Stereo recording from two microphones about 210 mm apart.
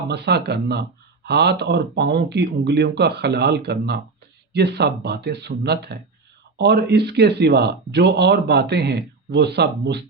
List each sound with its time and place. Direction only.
0.1 s speech: 50° right (ahead or behind)